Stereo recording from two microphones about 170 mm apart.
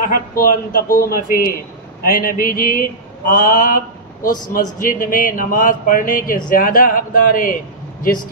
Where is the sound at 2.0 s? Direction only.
55° left (ahead or behind).